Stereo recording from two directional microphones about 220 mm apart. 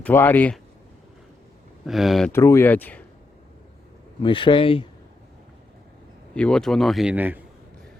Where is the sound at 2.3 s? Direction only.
10° left (ahead or behind).